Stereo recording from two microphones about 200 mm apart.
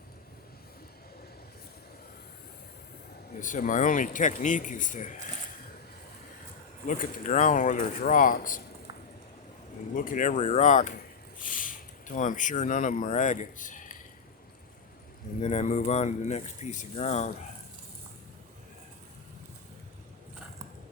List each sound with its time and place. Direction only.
3.4 s speech: 40° left (ahead or behind)
6.8 s speech: 40° left (ahead or behind)
9.9 s speech: 40° left (ahead or behind)
15.4 s speech: 35° left (ahead or behind)